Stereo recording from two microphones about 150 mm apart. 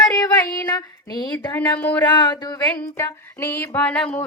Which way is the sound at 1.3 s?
10° left (ahead or behind).